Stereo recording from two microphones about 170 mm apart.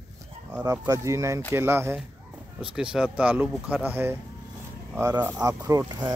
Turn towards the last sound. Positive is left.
turn(degrees=-20)  # may be behind; listen again after turning